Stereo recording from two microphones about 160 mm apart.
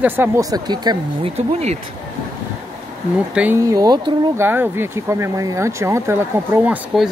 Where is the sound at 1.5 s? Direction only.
40° right (ahead or behind).